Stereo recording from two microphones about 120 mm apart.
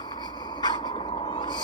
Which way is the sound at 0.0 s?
35° left (ahead or behind).